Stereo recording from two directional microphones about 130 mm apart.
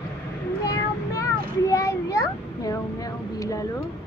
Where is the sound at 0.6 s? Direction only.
25° left (ahead or behind).